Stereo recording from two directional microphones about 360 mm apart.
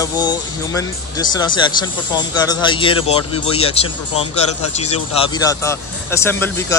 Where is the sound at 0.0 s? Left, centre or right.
Centre.